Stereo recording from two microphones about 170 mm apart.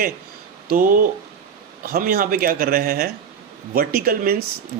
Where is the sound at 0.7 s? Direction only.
55° right (ahead or behind).